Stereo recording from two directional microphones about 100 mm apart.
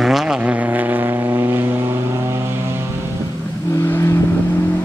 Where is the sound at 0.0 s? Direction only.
5° right (ahead or behind); by 1.6 s 25° right (ahead or behind).